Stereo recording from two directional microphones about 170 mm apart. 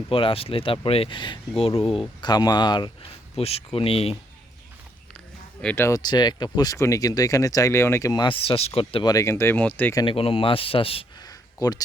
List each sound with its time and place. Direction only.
0.1 s speech: 30° left (ahead or behind)
3.3 s speech: 35° left (ahead or behind)
5.6 s speech: 15° left (ahead or behind); by 9.1 s 30° left (ahead or behind)
9.1 s speech: 15° left (ahead or behind)
10.0 s speech: 30° left (ahead or behind)
11.3 s a sound: 20° left (ahead or behind)